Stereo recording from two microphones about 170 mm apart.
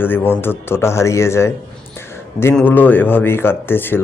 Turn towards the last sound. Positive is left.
turn(degrees=10)  # may be behind; listen again after turning